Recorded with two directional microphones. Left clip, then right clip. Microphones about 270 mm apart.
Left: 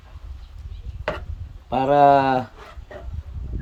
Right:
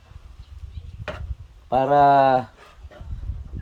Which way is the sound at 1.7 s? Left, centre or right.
Centre.